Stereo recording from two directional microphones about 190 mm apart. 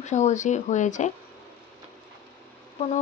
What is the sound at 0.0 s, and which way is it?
Speech, 40° left (ahead or behind).